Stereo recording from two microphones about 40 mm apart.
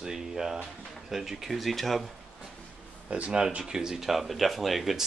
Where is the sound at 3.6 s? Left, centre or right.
Centre.